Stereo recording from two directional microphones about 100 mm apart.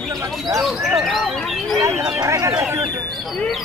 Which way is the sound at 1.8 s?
30° right (ahead or behind).